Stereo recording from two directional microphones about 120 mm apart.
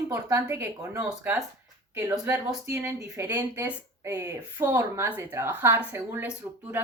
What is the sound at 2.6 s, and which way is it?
A woman's voice, 20° right (ahead or behind).